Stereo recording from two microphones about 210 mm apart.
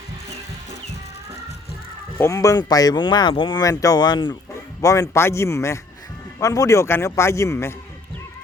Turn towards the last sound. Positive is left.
turn(degrees=15)  # may be behind; listen again after turning